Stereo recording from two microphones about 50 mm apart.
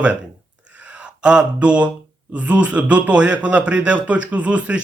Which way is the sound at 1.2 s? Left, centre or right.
Right.